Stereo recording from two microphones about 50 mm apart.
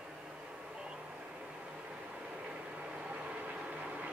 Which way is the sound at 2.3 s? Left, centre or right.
Right.